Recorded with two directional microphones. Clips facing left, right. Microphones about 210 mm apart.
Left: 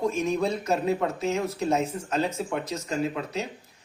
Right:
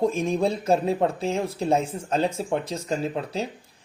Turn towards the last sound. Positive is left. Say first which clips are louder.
# right 1 dB
turn(degrees=-30)  # may be behind; listen again after turning